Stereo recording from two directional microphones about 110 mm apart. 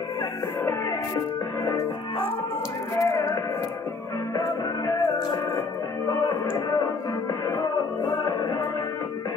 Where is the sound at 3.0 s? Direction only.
30° left (ahead or behind).